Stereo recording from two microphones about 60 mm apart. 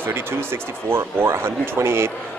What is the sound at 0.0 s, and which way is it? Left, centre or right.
Speech, right.